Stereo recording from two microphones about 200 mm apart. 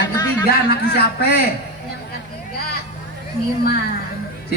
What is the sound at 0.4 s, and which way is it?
Speech, 50° left (ahead or behind).